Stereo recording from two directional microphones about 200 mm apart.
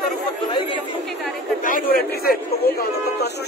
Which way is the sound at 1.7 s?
45° left (ahead or behind).